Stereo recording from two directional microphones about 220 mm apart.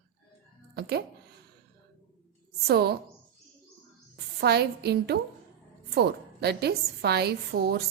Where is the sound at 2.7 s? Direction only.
45° right (ahead or behind).